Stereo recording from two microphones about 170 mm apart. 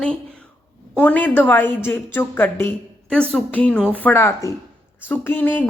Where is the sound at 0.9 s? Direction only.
10° left (ahead or behind).